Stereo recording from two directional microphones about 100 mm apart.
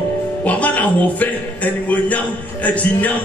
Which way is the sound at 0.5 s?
15° left (ahead or behind).